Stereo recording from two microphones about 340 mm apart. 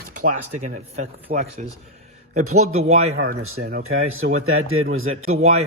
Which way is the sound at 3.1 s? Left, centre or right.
Right.